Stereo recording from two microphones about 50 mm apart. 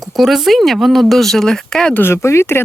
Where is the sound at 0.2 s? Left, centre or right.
Centre.